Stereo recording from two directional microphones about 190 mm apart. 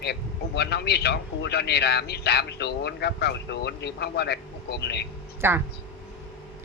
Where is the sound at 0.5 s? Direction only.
60° left (ahead or behind).